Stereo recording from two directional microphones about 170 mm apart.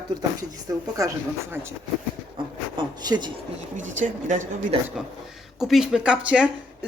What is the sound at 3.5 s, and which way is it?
Speech, 45° right (ahead or behind).